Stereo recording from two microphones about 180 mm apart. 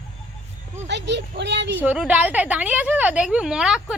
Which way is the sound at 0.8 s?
75° right (ahead or behind).